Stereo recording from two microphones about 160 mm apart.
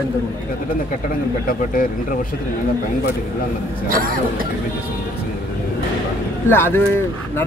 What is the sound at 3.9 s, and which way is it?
Speech, 60° right (ahead or behind).